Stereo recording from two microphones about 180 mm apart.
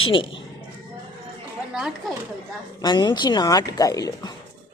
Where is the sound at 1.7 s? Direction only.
5° right (ahead or behind).